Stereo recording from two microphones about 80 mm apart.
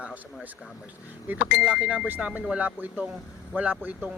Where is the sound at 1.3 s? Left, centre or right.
Right.